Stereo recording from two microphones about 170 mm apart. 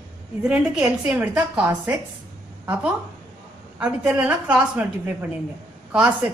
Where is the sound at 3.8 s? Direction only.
10° right (ahead or behind).